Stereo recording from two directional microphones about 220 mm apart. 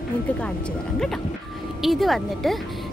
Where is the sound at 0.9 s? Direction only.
Centre (ahead or behind).